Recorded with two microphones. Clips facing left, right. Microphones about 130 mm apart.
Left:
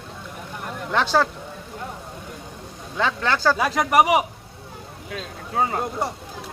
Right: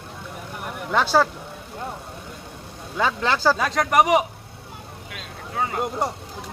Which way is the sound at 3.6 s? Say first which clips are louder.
Left 1 dB; 5° left (ahead or behind).